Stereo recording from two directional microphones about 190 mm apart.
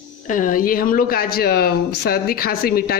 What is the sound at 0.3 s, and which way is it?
Speech, 45° left (ahead or behind).